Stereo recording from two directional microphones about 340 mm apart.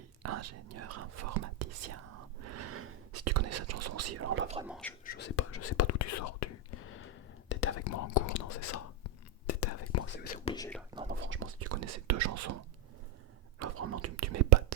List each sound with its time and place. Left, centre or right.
0.2 s speech: right
2.4 s whispering: right
4.6 s speech: centre
5.0 s speech: left
7.4 s whispering: left
7.9 s whispering: left
10.1 s whispering: left; by 10.8 s centre
11.1 s whispering: right
13.6 s whispering: right